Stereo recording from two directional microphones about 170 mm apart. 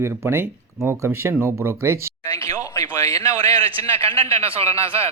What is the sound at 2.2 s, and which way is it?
Speech, 20° left (ahead or behind).